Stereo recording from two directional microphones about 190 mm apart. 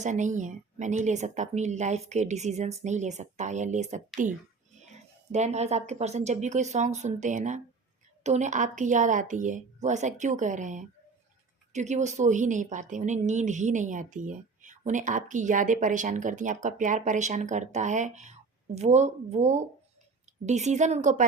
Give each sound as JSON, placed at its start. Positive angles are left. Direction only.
{"t": 0.0, "sound": "a woman's voice", "side_deg": -40}